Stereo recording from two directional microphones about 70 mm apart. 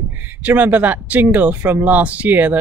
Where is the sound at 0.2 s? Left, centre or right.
Right.